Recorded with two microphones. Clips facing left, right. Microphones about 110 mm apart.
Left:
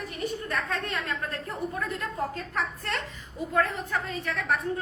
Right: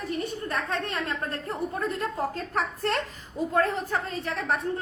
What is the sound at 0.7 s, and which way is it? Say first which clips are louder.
A woman's voice: right 2 dB; 30° right (ahead or behind).